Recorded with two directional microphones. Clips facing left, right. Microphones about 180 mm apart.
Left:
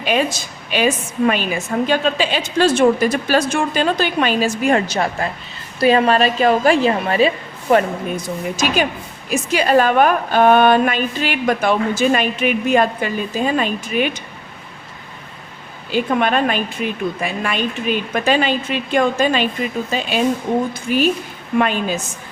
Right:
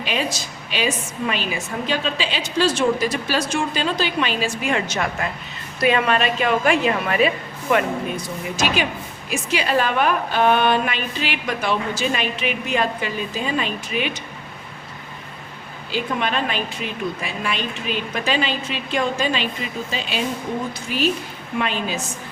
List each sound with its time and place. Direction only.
0.0 s a woman's voice: 50° left (ahead or behind); by 8.2 s 35° left (ahead or behind)
9.3 s a woman's voice: 45° left (ahead or behind)
15.9 s a woman's voice: 50° left (ahead or behind)